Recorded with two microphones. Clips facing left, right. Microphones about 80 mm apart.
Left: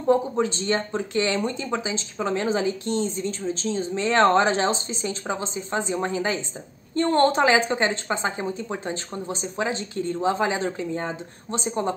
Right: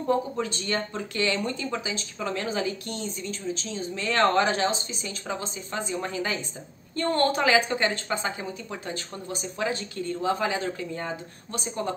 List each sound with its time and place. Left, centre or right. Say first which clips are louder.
0.1 s speech: left 6 dB; left